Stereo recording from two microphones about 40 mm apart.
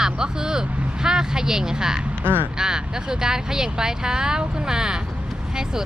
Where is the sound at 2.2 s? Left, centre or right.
Right.